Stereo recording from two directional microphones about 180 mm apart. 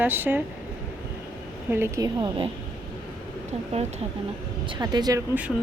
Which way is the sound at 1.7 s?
15° right (ahead or behind).